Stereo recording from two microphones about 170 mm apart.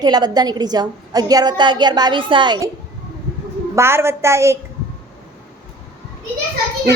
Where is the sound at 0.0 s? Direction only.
25° right (ahead or behind).